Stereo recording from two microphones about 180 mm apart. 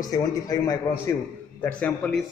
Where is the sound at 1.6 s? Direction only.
5° left (ahead or behind).